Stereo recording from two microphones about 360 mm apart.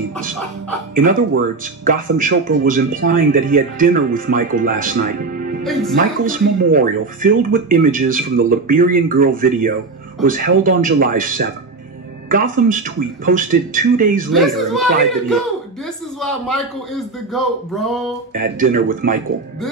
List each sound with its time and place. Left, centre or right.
0.9 s speech: right
5.6 s speech: centre
5.9 s speech: right
14.3 s a man's voice: centre
18.3 s speech: right